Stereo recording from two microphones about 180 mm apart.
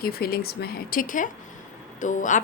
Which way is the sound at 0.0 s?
60° left (ahead or behind).